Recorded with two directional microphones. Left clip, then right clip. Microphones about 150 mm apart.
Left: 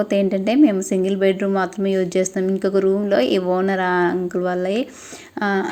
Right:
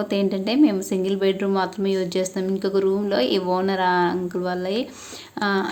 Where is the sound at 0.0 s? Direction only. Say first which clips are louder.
Left 4 dB; 25° left (ahead or behind).